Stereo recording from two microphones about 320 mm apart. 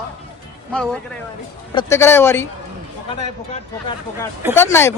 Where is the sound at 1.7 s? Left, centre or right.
Centre.